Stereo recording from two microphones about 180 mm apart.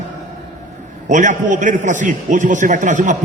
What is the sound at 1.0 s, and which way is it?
A man's voice, 45° right (ahead or behind).